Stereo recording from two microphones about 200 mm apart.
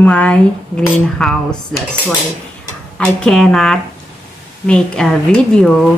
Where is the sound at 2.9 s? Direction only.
5° left (ahead or behind).